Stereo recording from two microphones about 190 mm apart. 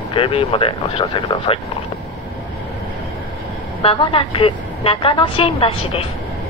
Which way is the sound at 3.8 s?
30° left (ahead or behind).